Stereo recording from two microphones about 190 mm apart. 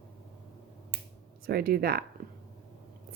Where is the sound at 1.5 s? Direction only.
55° right (ahead or behind).